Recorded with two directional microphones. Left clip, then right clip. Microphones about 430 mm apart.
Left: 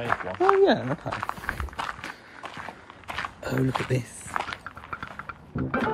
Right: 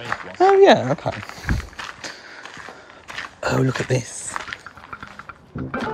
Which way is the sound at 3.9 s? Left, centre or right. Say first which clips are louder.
Right 5 dB; centre.